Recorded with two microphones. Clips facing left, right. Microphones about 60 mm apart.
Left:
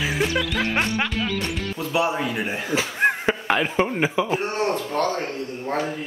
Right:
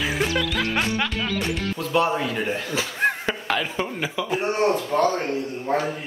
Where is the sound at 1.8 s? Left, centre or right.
Centre; by 4.4 s left.